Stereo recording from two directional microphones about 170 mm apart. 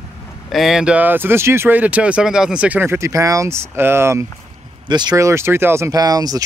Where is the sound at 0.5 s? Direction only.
Centre (ahead or behind).